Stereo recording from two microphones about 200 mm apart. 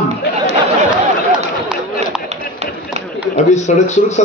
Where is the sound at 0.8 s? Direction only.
5° right (ahead or behind).